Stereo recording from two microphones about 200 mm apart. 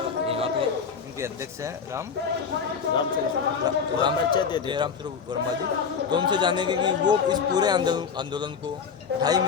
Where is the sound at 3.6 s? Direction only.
20° right (ahead or behind).